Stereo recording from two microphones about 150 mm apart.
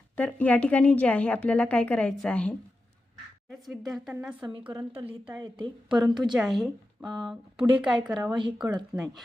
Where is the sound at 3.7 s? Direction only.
Centre (ahead or behind).